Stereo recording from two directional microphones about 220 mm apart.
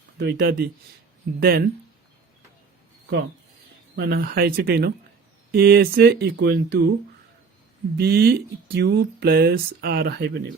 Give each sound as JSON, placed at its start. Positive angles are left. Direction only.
{"t": 0.2, "sound": "speech", "side_deg": -50}
{"t": 3.9, "sound": "speech", "side_deg": -45}
{"t": 7.9, "sound": "speech", "side_deg": -45}